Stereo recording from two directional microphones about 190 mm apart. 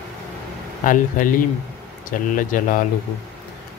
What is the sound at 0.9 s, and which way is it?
Speech, 45° left (ahead or behind).